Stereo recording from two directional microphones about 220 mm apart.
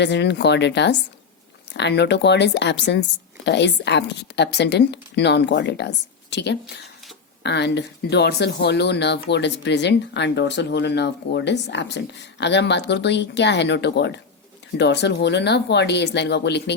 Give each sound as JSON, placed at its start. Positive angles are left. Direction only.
{"t": 0.0, "sound": "speech", "side_deg": 50}